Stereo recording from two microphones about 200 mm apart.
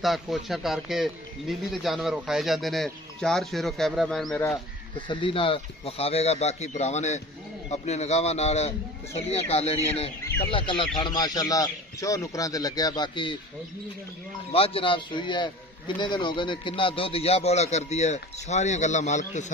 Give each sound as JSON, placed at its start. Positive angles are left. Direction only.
{"t": 0.0, "sound": "speech", "side_deg": 0}
{"t": 4.9, "sound": "a man's voice", "side_deg": 25}
{"t": 14.5, "sound": "a man's voice", "side_deg": 30}